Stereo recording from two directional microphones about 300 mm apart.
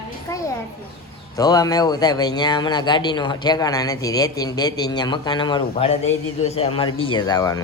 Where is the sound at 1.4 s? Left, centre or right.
Centre.